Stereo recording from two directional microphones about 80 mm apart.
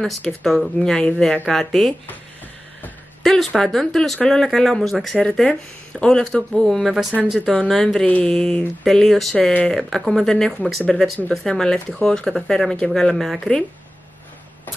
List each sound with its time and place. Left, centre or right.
0.2 s speech: centre
3.3 s speech: centre
9.5 s speech: centre
9.8 s speech: centre